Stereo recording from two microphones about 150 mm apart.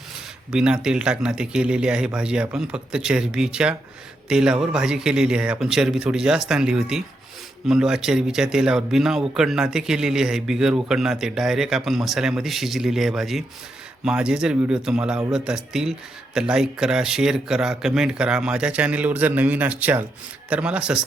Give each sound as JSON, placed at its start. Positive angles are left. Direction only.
{"t": 0.5, "sound": "speech", "side_deg": -5}